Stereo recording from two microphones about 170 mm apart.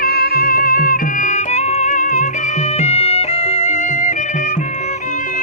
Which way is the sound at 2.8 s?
40° left (ahead or behind).